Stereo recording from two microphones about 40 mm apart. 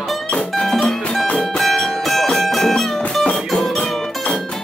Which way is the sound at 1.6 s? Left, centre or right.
Centre.